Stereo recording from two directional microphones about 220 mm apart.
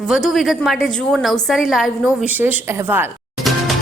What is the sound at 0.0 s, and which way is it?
A woman's voice, centre (ahead or behind).